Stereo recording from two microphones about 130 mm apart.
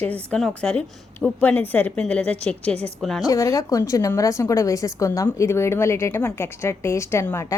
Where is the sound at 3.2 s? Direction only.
25° left (ahead or behind).